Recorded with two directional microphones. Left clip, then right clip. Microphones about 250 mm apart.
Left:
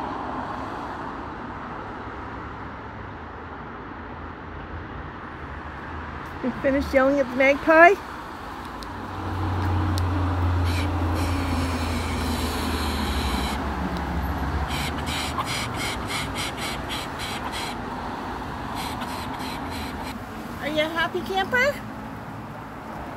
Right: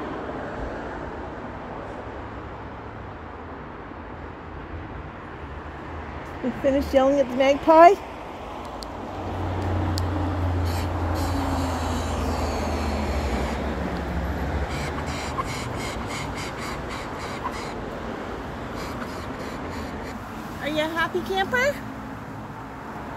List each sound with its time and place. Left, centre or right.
6.6 s speech: centre
10.7 s train: centre
12.2 s vehicle: centre
14.7 s a sound: centre
20.6 s vehicle: centre